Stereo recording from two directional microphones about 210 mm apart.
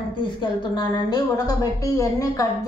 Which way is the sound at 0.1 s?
20° left (ahead or behind).